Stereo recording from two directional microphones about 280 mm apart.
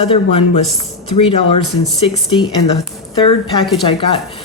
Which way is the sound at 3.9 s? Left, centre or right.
Centre.